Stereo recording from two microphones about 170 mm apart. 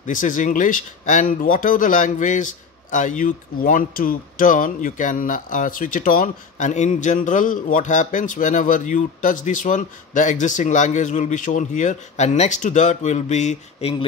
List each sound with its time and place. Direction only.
0.0 s speech: 50° left (ahead or behind)